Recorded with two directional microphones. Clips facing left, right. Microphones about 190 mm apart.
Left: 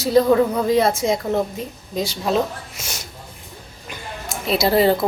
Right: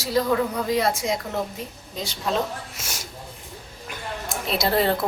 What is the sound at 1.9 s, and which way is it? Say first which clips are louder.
Speech: left 6 dB; 10° left (ahead or behind).